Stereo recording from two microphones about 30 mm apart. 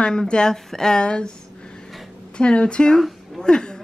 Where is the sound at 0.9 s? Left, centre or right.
Left.